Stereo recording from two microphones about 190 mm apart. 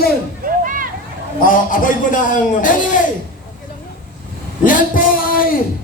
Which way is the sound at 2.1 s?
45° left (ahead or behind).